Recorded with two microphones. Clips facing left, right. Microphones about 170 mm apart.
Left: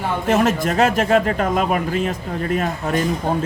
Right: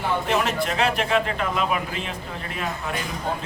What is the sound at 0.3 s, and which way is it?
A man's voice, 45° left (ahead or behind).